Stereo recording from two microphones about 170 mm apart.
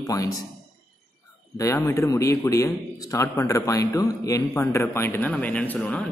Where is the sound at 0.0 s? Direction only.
20° left (ahead or behind).